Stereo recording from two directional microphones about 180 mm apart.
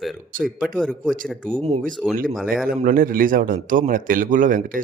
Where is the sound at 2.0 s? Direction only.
Centre (ahead or behind).